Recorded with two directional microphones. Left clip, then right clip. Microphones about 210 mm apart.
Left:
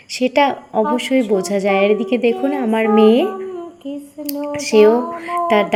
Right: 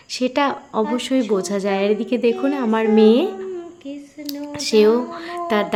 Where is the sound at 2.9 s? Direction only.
35° right (ahead or behind).